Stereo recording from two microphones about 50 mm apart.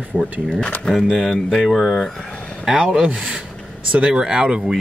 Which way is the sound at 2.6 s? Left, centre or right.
Centre.